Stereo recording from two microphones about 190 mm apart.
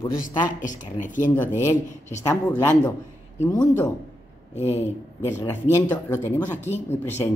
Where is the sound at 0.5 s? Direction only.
45° left (ahead or behind).